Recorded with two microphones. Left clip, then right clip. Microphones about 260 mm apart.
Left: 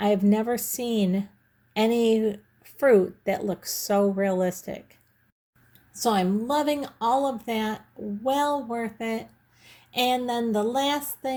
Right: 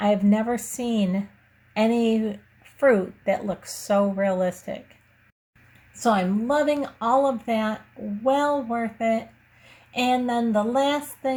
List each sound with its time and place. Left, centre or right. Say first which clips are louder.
0.0 s speech: right 1 dB; left
6.0 s speech: right 2 dB; left